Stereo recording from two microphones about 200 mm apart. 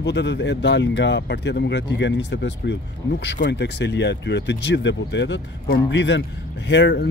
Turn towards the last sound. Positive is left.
turn(degrees=60)  # may be behind; listen again after turning